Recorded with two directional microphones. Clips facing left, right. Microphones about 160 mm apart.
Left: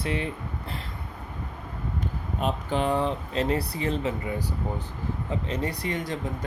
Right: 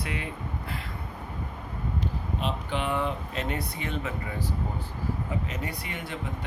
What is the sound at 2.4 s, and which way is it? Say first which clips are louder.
Speech: left 5 dB; 40° left (ahead or behind).